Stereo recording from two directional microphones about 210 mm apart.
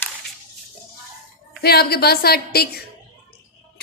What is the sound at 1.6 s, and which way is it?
A woman's voice, 50° left (ahead or behind).